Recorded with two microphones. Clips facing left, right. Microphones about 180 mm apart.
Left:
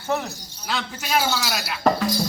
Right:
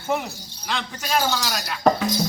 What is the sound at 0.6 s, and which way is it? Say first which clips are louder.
Speech: even; 5° left (ahead or behind).